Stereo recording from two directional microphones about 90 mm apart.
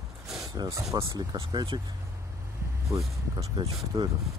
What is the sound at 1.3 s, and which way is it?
Speech, 55° right (ahead or behind).